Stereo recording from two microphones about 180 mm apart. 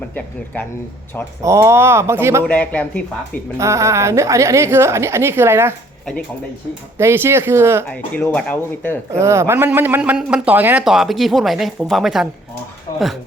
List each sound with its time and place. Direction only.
0.1 s speech: 10° left (ahead or behind)
1.4 s a woman's voice: 15° right (ahead or behind)
2.5 s speech: 10° left (ahead or behind)
3.6 s a woman's voice: 15° right (ahead or behind)
7.0 s a woman's voice: 15° right (ahead or behind)
7.9 s speech: 5° left (ahead or behind)
9.1 s speech: 15° right (ahead or behind)